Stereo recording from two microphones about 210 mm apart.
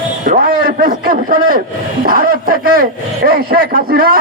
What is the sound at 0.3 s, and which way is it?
A man's voice, 40° right (ahead or behind).